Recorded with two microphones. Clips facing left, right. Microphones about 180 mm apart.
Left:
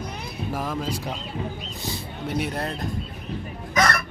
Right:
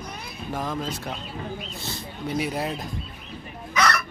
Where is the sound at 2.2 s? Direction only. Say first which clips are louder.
Right 1 dB; centre (ahead or behind).